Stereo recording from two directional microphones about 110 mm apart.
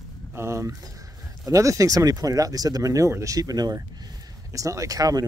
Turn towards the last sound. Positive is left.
turn(degrees=-35)  # may be behind; listen again after turning